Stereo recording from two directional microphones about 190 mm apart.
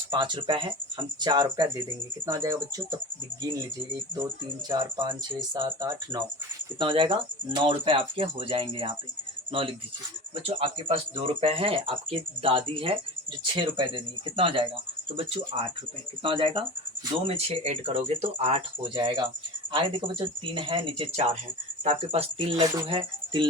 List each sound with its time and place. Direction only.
0.1 s speech: 25° right (ahead or behind)
4.7 s speech: 25° right (ahead or behind)